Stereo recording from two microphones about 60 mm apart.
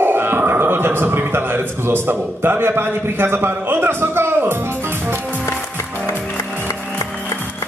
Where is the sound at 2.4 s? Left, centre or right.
Right.